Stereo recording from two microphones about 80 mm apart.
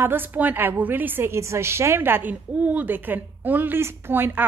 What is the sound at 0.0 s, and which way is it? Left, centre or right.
A woman's voice, right.